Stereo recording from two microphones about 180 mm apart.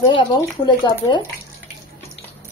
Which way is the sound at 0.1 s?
25° left (ahead or behind).